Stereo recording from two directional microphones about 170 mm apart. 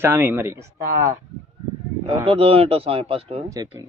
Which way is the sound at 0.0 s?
10° right (ahead or behind).